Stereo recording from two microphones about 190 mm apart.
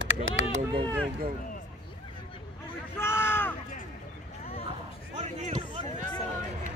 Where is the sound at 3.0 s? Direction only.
15° left (ahead or behind).